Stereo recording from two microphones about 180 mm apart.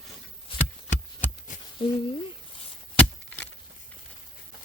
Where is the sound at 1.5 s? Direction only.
45° left (ahead or behind).